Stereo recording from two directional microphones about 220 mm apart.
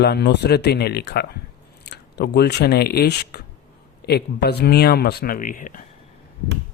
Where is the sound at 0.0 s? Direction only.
50° left (ahead or behind).